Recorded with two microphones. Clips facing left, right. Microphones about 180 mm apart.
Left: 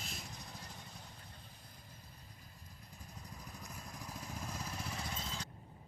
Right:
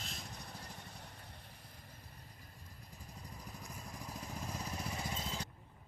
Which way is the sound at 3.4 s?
5° right (ahead or behind).